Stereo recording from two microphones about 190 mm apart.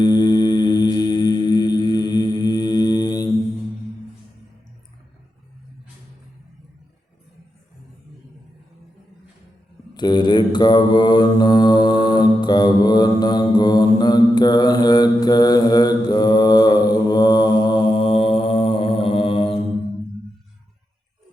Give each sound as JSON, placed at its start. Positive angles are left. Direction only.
{"t": 0.0, "sound": "mantra", "side_deg": 20}
{"t": 9.9, "sound": "mantra", "side_deg": 20}